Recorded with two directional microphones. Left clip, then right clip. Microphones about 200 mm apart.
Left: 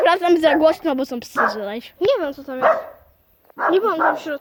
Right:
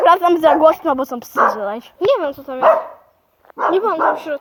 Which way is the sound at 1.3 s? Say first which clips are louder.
Right 5 dB; 20° left (ahead or behind).